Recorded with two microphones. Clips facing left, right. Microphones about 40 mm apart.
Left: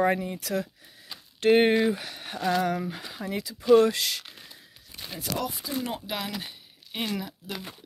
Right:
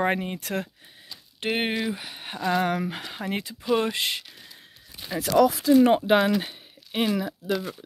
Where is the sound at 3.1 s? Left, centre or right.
Right.